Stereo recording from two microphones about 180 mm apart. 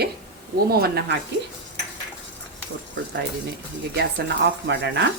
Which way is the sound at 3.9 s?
75° right (ahead or behind).